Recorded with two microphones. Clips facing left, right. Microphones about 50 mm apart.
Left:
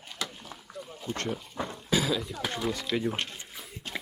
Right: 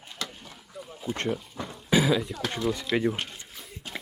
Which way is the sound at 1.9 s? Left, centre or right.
Centre.